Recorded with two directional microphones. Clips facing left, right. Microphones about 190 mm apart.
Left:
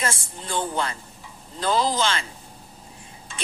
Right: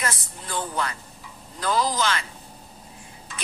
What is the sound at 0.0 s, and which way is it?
A woman's voice, 25° left (ahead or behind).